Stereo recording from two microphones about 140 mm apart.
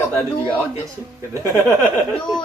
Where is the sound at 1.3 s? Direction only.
20° right (ahead or behind).